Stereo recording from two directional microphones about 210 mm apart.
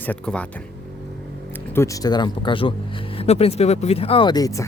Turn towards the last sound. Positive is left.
turn(degrees=15)  # may be behind; listen again after turning